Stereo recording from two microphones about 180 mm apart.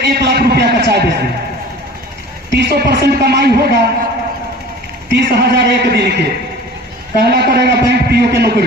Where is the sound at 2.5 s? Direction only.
65° right (ahead or behind).